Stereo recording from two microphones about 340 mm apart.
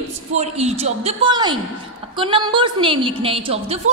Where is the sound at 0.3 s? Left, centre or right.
Centre.